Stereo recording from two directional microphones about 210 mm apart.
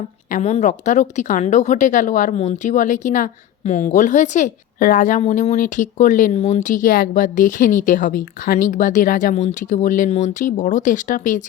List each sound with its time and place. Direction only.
0.3 s a woman's voice: 35° left (ahead or behind)